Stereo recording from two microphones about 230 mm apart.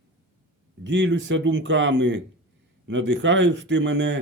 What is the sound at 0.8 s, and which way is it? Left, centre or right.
Speech, right.